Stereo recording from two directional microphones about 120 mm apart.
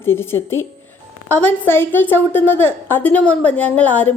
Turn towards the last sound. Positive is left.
turn(degrees=15)  # may be behind; listen again after turning